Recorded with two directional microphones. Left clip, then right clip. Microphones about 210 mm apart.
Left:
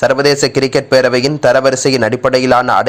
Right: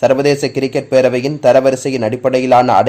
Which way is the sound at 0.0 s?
10° left (ahead or behind).